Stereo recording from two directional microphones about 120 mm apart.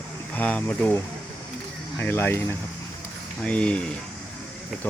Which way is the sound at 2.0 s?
20° left (ahead or behind).